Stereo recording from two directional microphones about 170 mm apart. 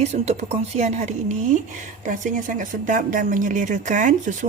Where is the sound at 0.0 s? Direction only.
40° right (ahead or behind).